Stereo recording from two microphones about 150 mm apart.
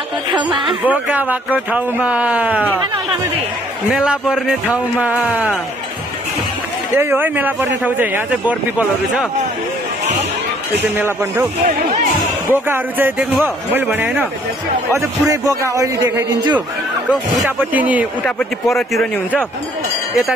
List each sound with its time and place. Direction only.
0.3 s speech: 30° right (ahead or behind)
0.7 s speech: 10° right (ahead or behind)
3.9 s speech: 5° right (ahead or behind)
7.0 s speech: 15° right (ahead or behind)
12.6 s a man's voice: 15° right (ahead or behind)
17.7 s speech: 10° right (ahead or behind)
18.2 s speech: centre (ahead or behind)